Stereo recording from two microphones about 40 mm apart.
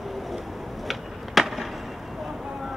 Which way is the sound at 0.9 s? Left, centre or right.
Centre.